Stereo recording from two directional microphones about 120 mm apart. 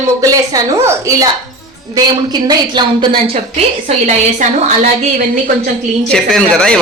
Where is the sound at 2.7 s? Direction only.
40° right (ahead or behind).